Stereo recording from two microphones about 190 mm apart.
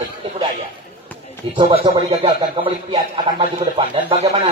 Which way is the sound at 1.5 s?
30° right (ahead or behind).